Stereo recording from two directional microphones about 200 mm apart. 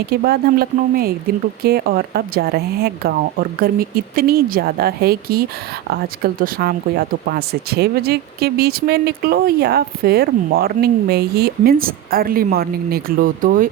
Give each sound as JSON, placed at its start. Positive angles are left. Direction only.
{"t": 0.1, "sound": "speech", "side_deg": -50}